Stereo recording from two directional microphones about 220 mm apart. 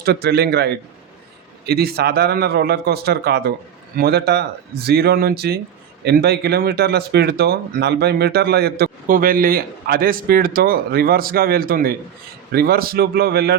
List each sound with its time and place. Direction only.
0.0 s speech: 45° right (ahead or behind)